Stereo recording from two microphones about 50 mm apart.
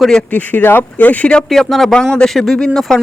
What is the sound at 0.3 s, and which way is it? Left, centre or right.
Speech, left.